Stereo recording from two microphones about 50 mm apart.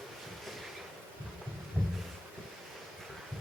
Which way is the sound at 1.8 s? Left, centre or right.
Right.